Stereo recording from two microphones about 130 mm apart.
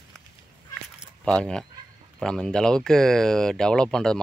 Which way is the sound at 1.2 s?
5° left (ahead or behind).